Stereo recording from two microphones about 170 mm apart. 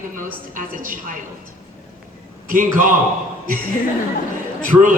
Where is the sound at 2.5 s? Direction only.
50° right (ahead or behind).